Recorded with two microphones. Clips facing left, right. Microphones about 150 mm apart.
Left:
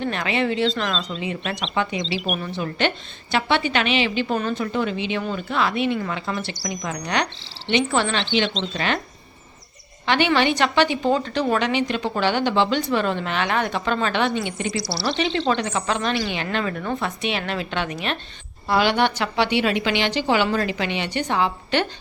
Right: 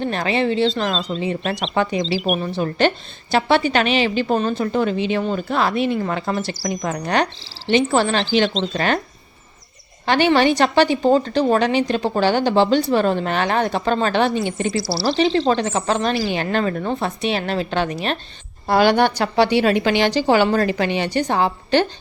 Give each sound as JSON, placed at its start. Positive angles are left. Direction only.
{"t": 0.0, "sound": "a woman's voice", "side_deg": -35}
{"t": 10.1, "sound": "a woman's voice", "side_deg": -40}
{"t": 16.3, "sound": "a woman's voice", "side_deg": -40}